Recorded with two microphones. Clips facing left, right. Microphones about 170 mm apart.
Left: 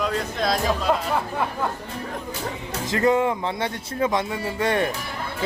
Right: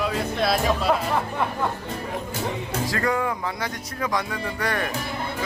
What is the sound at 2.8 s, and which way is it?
Speech, 20° left (ahead or behind).